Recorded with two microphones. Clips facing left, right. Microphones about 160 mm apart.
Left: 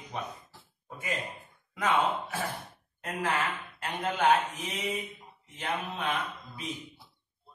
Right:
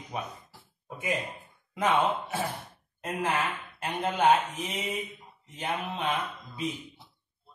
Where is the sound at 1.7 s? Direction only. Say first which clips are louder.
Right 2 dB; 20° right (ahead or behind).